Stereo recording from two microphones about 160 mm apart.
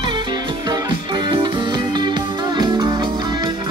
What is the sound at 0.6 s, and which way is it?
Music, 25° right (ahead or behind).